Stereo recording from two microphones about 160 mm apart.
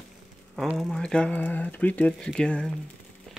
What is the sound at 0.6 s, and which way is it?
Speech, centre (ahead or behind).